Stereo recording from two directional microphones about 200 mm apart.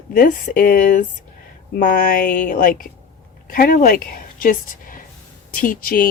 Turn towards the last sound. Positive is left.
turn(degrees=45)  # may be behind; listen again after turning